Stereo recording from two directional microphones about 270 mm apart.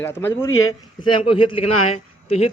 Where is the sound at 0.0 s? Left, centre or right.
Centre.